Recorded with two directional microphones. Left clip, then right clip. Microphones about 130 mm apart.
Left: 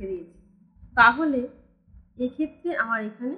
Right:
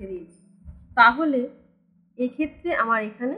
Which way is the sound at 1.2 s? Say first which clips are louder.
Right 2 dB; 30° right (ahead or behind).